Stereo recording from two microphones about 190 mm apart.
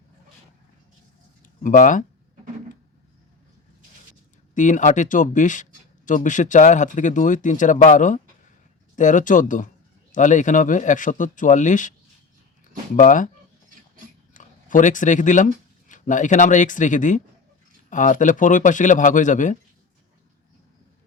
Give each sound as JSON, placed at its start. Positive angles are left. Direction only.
{"t": 1.6, "sound": "speech", "side_deg": 45}
{"t": 4.5, "sound": "speech", "side_deg": 40}
{"t": 13.0, "sound": "speech", "side_deg": 45}
{"t": 14.3, "sound": "speech", "side_deg": 40}